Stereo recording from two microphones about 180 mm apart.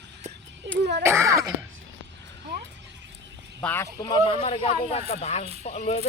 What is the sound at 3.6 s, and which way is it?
Speech, 10° left (ahead or behind).